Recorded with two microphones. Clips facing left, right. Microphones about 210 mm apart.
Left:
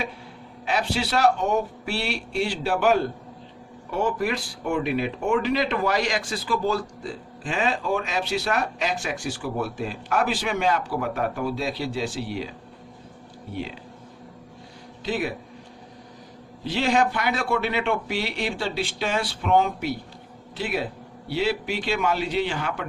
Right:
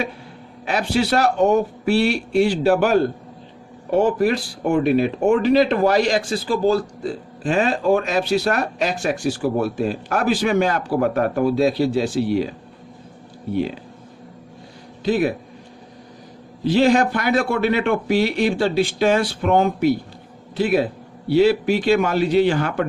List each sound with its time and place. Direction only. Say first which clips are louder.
0.6 s speech: right 5 dB; 45° right (ahead or behind)
7.4 s speech: right 7 dB; 45° right (ahead or behind)
15.0 s speech: right 8 dB; 40° right (ahead or behind)
16.6 s a man's voice: right 7 dB; 40° right (ahead or behind)